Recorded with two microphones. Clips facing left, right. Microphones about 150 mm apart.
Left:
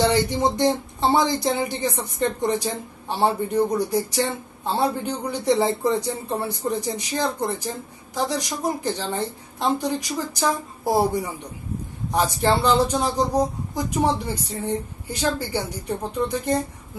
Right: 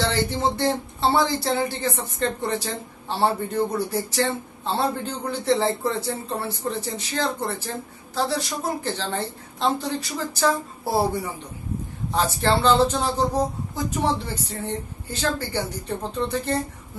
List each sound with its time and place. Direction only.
0.0 s a man's voice: 15° left (ahead or behind)
12.1 s a man's voice: 15° left (ahead or behind)